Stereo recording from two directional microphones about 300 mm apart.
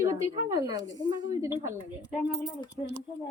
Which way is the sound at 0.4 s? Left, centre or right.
Centre.